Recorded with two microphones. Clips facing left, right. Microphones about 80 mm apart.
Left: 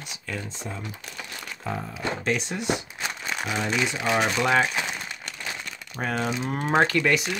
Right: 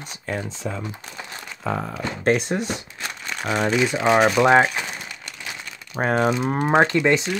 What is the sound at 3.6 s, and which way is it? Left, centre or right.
Speech, centre.